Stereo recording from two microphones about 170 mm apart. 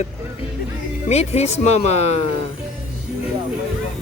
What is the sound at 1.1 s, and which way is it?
Speech, 40° left (ahead or behind).